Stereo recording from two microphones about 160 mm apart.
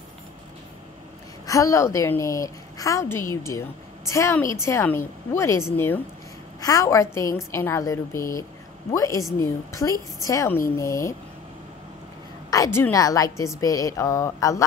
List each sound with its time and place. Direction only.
1.4 s a woman's voice: 20° left (ahead or behind)
12.4 s a woman's voice: 20° left (ahead or behind)